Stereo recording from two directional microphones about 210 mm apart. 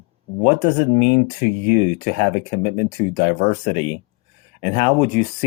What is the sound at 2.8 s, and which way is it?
Speech, 30° left (ahead or behind).